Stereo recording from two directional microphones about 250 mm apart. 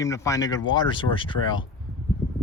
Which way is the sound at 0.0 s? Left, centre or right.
Centre.